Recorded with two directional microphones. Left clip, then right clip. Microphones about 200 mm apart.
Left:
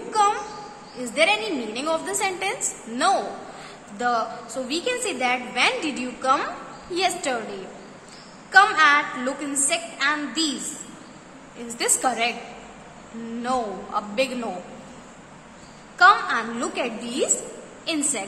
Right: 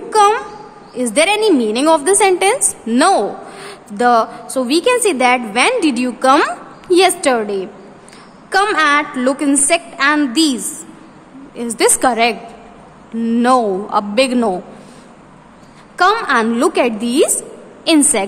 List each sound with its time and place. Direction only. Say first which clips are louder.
0.1 s a sound: right 9 dB; 55° right (ahead or behind)
0.9 s a woman's voice: right 7 dB; 55° right (ahead or behind)
13.4 s a woman's voice: right 13 dB; 55° right (ahead or behind)
16.0 s a woman's voice: right 4 dB; 55° right (ahead or behind)